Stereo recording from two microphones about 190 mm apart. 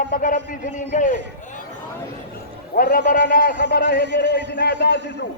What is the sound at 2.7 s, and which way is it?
A man's voice, 50° left (ahead or behind).